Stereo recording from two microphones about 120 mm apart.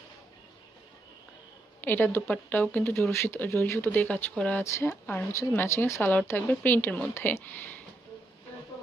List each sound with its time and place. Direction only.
1.8 s a woman's voice: 15° left (ahead or behind)